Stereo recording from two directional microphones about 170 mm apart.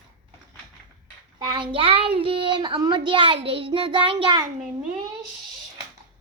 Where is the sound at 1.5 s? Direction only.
30° right (ahead or behind).